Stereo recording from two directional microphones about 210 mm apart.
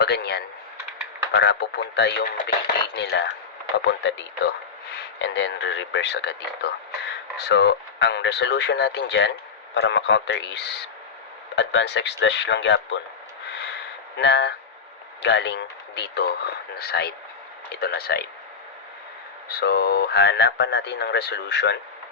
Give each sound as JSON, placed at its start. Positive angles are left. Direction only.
{"t": 0.0, "sound": "speech", "side_deg": 50}
{"t": 13.5, "sound": "a sound", "side_deg": 55}
{"t": 14.2, "sound": "speech", "side_deg": 55}
{"t": 19.5, "sound": "speech", "side_deg": 50}